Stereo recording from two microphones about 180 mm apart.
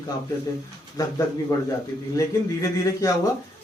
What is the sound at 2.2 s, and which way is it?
Speech, 15° left (ahead or behind).